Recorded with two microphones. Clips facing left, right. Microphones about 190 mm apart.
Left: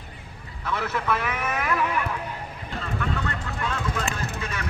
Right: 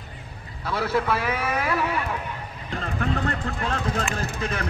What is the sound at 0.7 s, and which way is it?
Speech, 35° right (ahead or behind).